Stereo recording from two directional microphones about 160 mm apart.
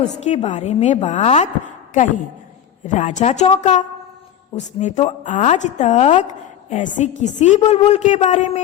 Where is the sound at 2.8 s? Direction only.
50° left (ahead or behind).